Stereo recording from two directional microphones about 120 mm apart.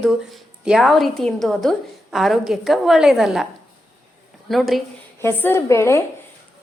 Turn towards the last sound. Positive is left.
turn(degrees=20)  # may be behind; listen again after turning